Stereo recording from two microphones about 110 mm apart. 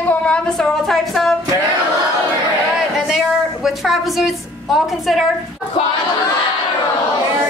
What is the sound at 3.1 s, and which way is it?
A woman's voice, centre (ahead or behind).